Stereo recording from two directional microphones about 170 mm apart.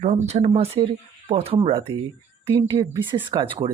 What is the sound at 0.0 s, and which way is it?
Speech, 40° right (ahead or behind).